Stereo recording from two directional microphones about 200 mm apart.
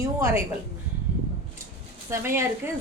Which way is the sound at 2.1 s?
15° right (ahead or behind).